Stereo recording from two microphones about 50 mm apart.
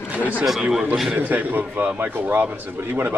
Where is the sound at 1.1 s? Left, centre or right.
Right.